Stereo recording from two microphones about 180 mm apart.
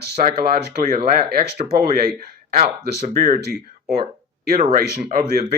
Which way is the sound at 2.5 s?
40° right (ahead or behind).